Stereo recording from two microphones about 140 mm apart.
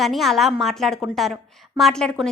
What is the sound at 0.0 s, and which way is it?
A woman's voice, centre (ahead or behind).